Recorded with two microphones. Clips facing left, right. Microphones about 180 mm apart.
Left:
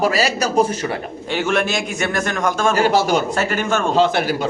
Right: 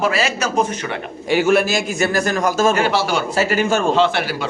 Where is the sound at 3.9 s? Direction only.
45° left (ahead or behind).